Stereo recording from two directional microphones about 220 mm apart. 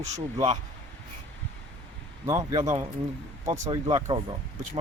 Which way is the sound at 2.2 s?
15° right (ahead or behind).